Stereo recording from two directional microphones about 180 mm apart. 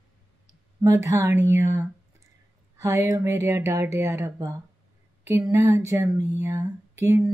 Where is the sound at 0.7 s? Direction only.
15° right (ahead or behind).